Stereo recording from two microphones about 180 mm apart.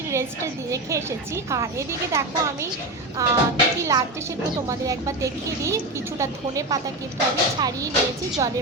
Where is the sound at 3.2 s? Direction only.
15° right (ahead or behind).